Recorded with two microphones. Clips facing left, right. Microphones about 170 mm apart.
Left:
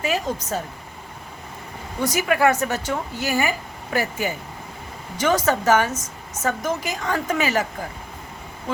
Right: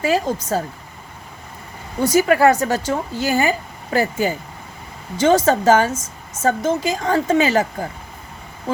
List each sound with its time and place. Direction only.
0.0 s a woman's voice: 30° right (ahead or behind)
2.0 s a woman's voice: 30° right (ahead or behind)